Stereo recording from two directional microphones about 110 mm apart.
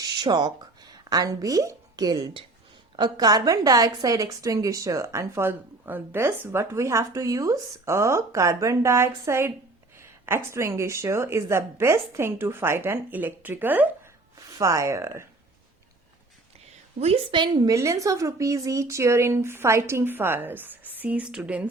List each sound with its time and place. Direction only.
0.0 s a woman's voice: 40° right (ahead or behind); by 13.9 s 15° right (ahead or behind)
14.3 s a woman's voice: 30° right (ahead or behind)
17.3 s a woman's voice: 45° right (ahead or behind); by 21.6 s 10° right (ahead or behind)